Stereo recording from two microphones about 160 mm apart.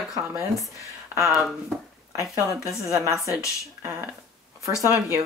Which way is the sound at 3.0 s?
20° right (ahead or behind).